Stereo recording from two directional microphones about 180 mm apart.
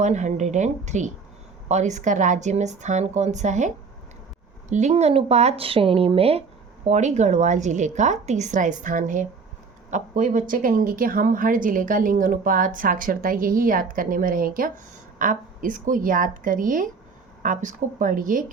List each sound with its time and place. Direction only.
0.0 s a woman's voice: 40° right (ahead or behind)
4.7 s a woman's voice: 40° right (ahead or behind)